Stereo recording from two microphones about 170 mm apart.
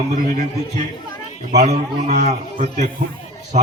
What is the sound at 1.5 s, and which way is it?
A man's voice, 40° right (ahead or behind).